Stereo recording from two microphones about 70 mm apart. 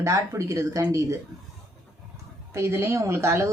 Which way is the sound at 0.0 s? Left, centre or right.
Right.